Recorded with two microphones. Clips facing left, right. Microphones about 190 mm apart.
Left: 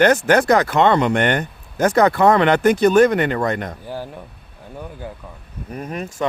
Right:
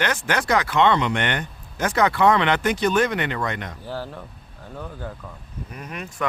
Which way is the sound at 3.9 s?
15° left (ahead or behind).